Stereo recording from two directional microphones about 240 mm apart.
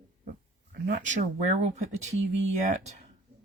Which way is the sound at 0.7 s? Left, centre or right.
Right.